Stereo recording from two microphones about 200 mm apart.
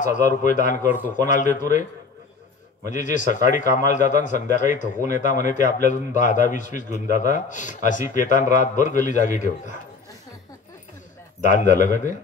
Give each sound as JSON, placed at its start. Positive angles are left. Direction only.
{"t": 0.0, "sound": "a man's voice", "side_deg": 40}
{"t": 2.9, "sound": "a man's voice", "side_deg": 40}
{"t": 11.4, "sound": "a man's voice", "side_deg": 40}